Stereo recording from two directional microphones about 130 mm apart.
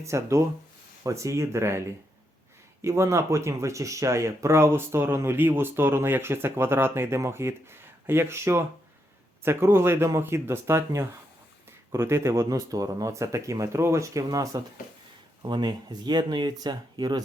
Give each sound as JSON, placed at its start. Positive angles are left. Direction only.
{"t": 0.0, "sound": "speech", "side_deg": -20}
{"t": 2.8, "sound": "speech", "side_deg": -20}